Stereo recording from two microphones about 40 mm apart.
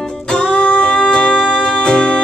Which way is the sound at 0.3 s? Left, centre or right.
Left.